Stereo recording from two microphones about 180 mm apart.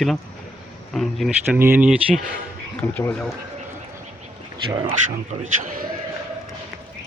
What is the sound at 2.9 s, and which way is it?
Speech, 10° left (ahead or behind).